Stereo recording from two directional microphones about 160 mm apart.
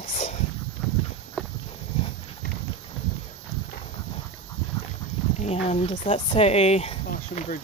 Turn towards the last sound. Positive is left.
turn(degrees=40)  # may be behind; listen again after turning